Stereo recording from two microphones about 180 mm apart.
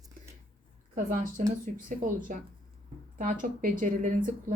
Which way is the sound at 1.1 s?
45° right (ahead or behind).